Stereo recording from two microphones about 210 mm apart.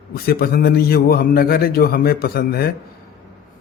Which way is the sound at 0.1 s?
45° left (ahead or behind).